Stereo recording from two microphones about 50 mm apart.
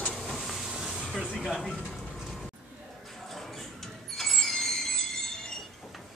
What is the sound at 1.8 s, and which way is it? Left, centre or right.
Vehicle, centre.